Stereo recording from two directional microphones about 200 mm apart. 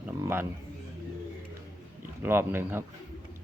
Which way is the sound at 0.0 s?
10° right (ahead or behind).